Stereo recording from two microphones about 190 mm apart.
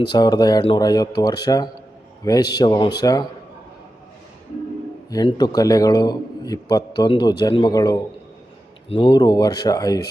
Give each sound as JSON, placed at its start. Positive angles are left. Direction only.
{"t": 0.0, "sound": "a man's voice", "side_deg": 20}
{"t": 5.1, "sound": "a man's voice", "side_deg": 20}